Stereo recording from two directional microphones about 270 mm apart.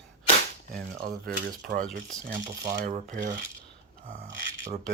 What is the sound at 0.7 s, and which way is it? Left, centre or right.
Speech, right.